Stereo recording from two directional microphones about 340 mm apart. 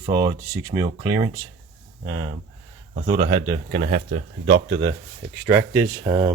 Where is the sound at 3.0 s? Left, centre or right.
Centre.